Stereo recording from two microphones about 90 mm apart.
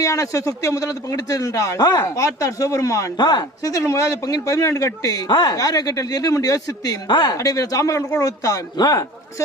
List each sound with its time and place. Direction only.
0.0 s speech: 40° left (ahead or behind)
3.2 s speech: 55° left (ahead or behind)
5.5 s speech: 45° left (ahead or behind)
7.1 s a man's voice: 55° left (ahead or behind)
7.3 s a man's voice: 40° left (ahead or behind)